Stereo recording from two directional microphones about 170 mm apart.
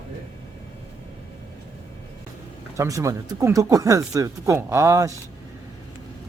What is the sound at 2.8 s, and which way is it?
Speech, 20° right (ahead or behind).